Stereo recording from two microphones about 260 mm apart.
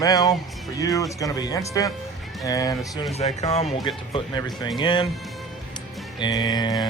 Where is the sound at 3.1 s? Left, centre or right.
Left.